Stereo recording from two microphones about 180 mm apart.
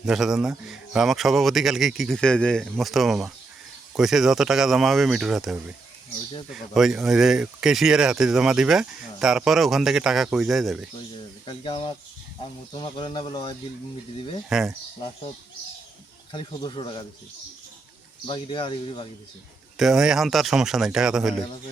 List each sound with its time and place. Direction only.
0.0 s speech: centre (ahead or behind)
11.4 s speech: 30° left (ahead or behind)
14.5 s speech: centre (ahead or behind)
16.3 s speech: 25° left (ahead or behind)
18.3 s speech: 25° left (ahead or behind)
19.7 s speech: centre (ahead or behind)